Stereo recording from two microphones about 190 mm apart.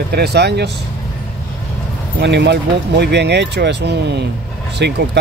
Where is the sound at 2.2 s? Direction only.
65° right (ahead or behind).